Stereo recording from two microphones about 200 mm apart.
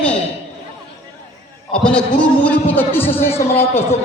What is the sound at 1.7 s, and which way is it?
A man's voice, 5° left (ahead or behind).